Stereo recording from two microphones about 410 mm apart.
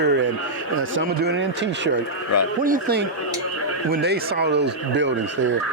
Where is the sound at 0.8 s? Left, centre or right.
Right.